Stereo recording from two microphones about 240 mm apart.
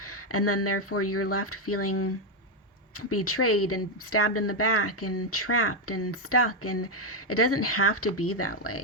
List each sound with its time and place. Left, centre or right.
0.3 s speech: left